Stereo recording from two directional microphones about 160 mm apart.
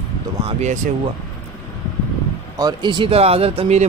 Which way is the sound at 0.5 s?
45° right (ahead or behind).